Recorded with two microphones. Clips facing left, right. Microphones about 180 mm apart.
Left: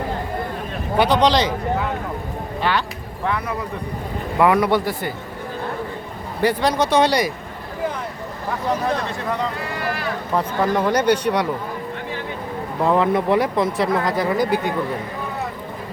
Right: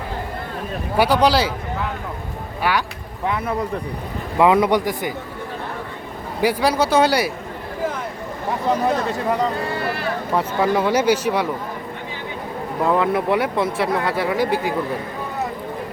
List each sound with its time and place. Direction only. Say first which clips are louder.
0.9 s speech: even; 10° right (ahead or behind)
2.6 s speech: right 1 dB; 10° right (ahead or behind)
3.2 s speech: right 2 dB; 25° right (ahead or behind)
6.4 s speech: even; 10° right (ahead or behind)
9.6 s speech: right 2 dB; 30° right (ahead or behind)
10.3 s speech: right 1 dB; 5° right (ahead or behind)
12.8 s speech: left 1 dB; centre (ahead or behind)